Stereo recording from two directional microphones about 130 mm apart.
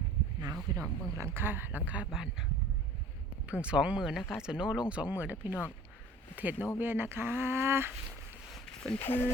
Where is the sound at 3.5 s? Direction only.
10° right (ahead or behind).